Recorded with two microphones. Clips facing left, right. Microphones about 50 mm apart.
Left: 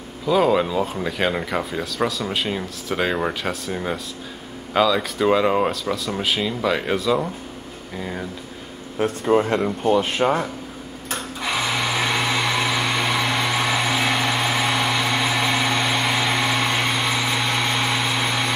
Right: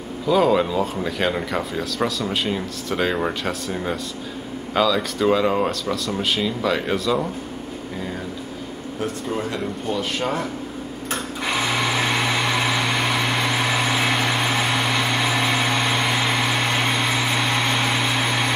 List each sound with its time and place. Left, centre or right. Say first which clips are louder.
0.3 s speech: even; centre
9.0 s speech: left 7 dB; left
11.1 s sewing machine: even; centre
15.2 s vehicle: even; centre